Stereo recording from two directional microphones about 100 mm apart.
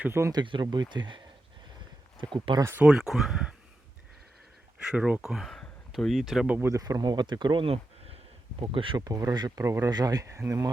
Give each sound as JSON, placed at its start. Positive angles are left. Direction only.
{"t": 0.0, "sound": "speech", "side_deg": -25}
{"t": 0.6, "sound": "speech", "side_deg": -45}
{"t": 2.5, "sound": "speech", "side_deg": -60}
{"t": 2.8, "sound": "speech", "side_deg": -5}
{"t": 4.9, "sound": "speech", "side_deg": -10}
{"t": 6.6, "sound": "speech", "side_deg": -35}
{"t": 8.7, "sound": "speech", "side_deg": -60}
{"t": 9.0, "sound": "speech", "side_deg": -40}
{"t": 9.6, "sound": "speech", "side_deg": -30}